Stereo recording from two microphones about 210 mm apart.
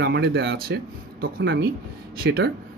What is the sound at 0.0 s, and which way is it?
Speech, 55° right (ahead or behind).